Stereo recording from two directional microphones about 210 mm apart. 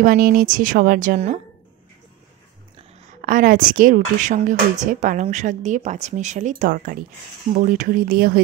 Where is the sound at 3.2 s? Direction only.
40° right (ahead or behind).